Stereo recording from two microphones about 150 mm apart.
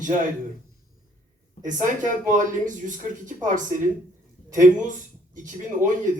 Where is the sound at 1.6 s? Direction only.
55° right (ahead or behind).